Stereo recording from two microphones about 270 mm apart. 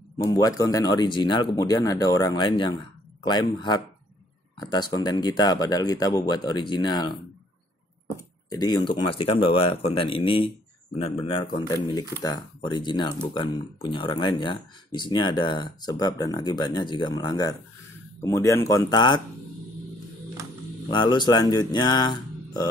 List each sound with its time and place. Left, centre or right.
0.2 s speech: centre
8.5 s speech: centre
20.9 s speech: centre